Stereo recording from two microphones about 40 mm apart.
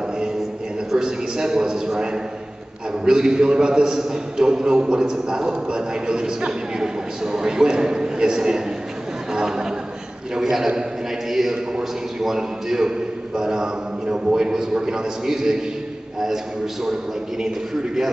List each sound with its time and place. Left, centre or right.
0.9 s a man's voice: centre
3.1 s a man's voice: centre